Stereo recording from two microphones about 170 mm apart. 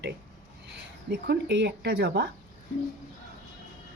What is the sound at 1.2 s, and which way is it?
A woman's voice, 85° right.